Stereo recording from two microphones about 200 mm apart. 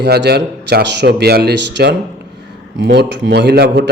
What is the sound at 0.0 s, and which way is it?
A man's voice, 55° right (ahead or behind).